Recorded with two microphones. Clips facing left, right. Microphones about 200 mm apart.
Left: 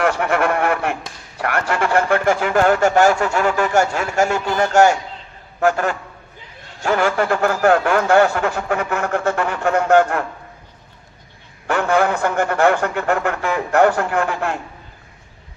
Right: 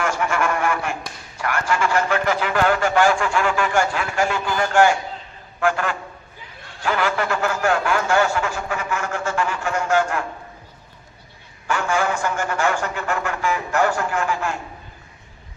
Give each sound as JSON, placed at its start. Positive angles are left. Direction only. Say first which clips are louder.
{"t": 0.0, "sound": "a sound", "louder": "left 4 dB", "side_deg": 60}
{"t": 1.4, "sound": "a man's voice", "louder": "left 2 dB", "side_deg": 60}
{"t": 11.7, "sound": "a man's voice", "louder": "left 5 dB", "side_deg": 60}